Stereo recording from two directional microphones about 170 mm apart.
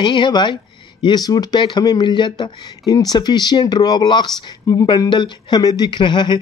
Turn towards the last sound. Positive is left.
turn(degrees=25)  # may be behind; listen again after turning